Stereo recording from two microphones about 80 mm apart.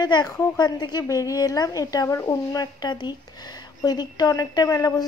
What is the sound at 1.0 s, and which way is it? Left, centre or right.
A woman's voice, left.